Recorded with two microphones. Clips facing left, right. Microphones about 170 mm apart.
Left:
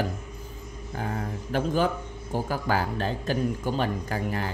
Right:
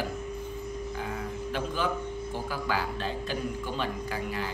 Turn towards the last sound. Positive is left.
turn(degrees=45)  # may be behind; listen again after turning